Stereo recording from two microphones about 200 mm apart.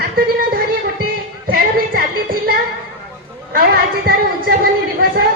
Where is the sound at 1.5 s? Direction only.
45° right (ahead or behind).